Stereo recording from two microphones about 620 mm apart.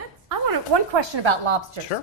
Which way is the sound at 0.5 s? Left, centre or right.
Right.